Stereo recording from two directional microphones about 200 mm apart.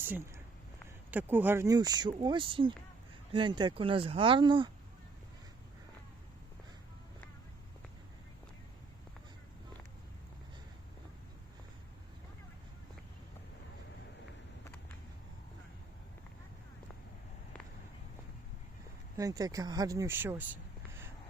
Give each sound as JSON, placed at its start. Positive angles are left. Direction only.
{"t": 1.1, "sound": "speech", "side_deg": -10}
{"t": 19.1, "sound": "speech", "side_deg": -15}